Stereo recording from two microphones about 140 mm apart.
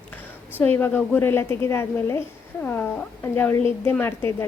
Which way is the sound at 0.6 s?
15° left (ahead or behind).